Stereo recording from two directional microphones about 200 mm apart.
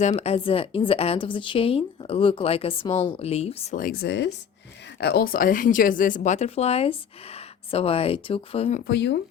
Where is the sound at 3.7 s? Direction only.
50° left (ahead or behind).